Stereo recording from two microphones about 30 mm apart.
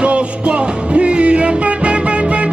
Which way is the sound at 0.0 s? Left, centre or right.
Right.